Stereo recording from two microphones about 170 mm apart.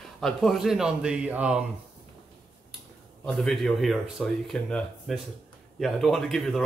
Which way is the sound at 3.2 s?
Centre (ahead or behind).